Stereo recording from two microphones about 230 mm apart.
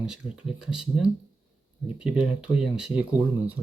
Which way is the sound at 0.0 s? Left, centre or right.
Centre.